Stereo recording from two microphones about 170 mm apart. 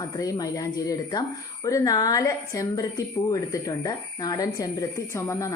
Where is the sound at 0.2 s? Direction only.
20° left (ahead or behind).